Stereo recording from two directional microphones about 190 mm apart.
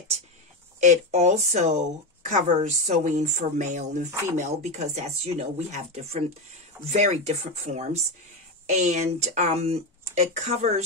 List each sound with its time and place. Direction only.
0.7 s speech: 40° right (ahead or behind)